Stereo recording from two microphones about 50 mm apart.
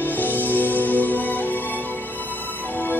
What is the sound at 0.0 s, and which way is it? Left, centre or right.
Music, left.